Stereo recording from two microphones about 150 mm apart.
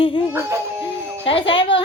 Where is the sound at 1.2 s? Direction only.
35° left (ahead or behind).